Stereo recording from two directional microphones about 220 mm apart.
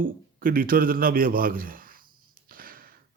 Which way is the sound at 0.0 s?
40° right (ahead or behind).